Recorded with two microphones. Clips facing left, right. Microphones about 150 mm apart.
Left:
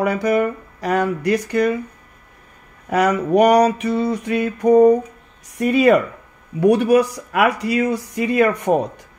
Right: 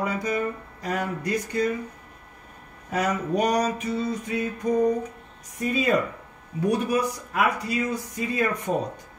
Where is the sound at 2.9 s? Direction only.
75° left (ahead or behind).